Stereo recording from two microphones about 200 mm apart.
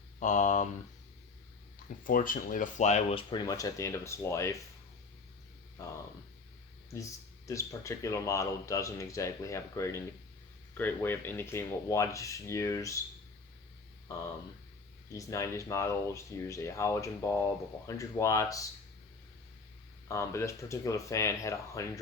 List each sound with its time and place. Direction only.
0.2 s speech: 35° left (ahead or behind)
2.0 s speech: 45° left (ahead or behind); by 4.5 s 15° left (ahead or behind)
5.8 s speech: 15° left (ahead or behind)
15.1 s speech: 15° left (ahead or behind)
20.1 s speech: 15° left (ahead or behind)